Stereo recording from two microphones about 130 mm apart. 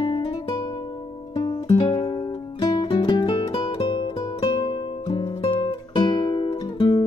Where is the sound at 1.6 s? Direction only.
35° left (ahead or behind).